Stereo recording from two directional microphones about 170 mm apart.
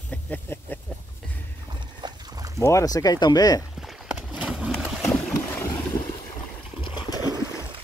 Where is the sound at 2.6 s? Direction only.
20° left (ahead or behind).